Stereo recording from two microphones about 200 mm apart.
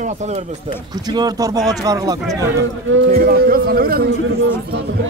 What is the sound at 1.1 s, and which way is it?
Speech, 20° right (ahead or behind).